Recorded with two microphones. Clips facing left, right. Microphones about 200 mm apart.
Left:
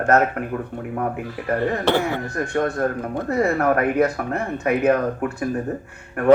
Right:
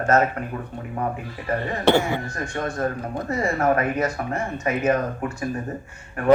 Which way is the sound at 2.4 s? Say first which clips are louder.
Left 5 dB; 55° left (ahead or behind).